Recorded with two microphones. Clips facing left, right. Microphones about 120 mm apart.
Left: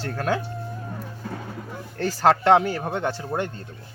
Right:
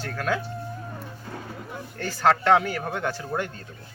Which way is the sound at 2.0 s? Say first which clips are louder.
Left 3 dB; 35° left (ahead or behind).